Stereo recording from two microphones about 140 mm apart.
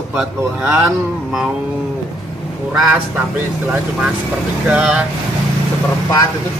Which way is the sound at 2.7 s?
15° right (ahead or behind).